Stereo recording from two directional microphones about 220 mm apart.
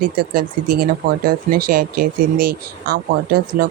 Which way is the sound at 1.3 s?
40° right (ahead or behind).